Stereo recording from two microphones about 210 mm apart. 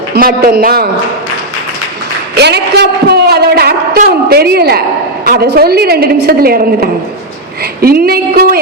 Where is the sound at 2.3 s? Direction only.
50° right (ahead or behind).